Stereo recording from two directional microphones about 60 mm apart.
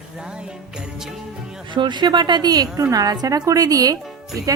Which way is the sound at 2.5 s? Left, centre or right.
Right.